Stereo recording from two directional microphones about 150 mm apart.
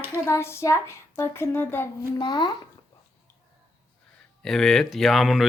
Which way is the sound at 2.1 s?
30° left (ahead or behind).